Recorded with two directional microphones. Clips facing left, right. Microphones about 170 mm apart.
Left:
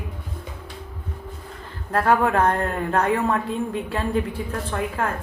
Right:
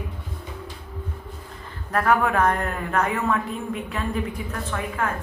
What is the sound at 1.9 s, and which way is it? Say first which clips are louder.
A woman's voice: left 2 dB; 30° left (ahead or behind).